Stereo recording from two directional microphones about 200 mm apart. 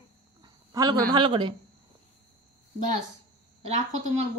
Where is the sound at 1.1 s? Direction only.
25° right (ahead or behind).